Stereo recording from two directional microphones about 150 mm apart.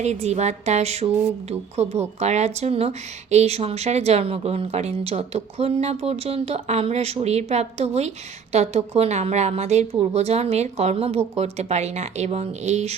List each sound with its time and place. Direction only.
0.0 s speech: 50° right (ahead or behind)